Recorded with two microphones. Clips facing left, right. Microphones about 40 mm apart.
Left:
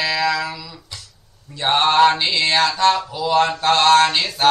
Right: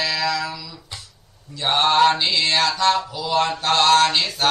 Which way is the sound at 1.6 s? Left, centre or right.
Left.